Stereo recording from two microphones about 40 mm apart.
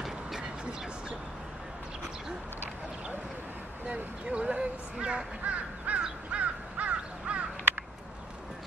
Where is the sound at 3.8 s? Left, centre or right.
Right.